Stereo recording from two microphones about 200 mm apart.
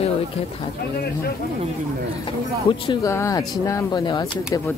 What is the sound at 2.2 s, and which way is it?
Speech, 25° left (ahead or behind).